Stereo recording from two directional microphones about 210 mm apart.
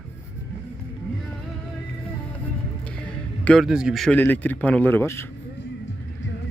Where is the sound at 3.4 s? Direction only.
Centre (ahead or behind).